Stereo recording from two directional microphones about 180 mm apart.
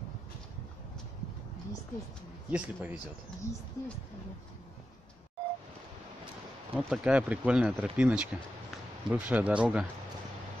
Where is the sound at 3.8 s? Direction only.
20° left (ahead or behind).